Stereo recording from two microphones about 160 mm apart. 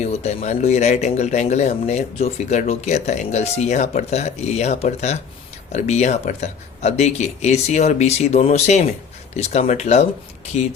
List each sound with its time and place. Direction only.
0.0 s speech: 45° left (ahead or behind)